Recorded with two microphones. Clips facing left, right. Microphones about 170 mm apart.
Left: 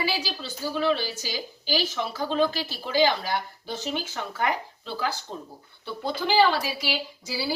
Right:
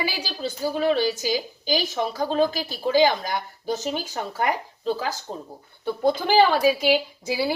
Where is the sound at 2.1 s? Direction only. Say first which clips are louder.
Right 2 dB; 45° right (ahead or behind).